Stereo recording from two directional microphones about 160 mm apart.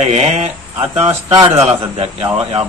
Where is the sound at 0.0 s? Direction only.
45° right (ahead or behind).